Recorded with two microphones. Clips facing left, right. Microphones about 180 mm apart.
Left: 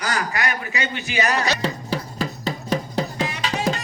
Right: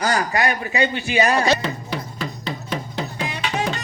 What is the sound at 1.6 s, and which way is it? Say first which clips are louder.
Music: left 2 dB; 35° left (ahead or behind).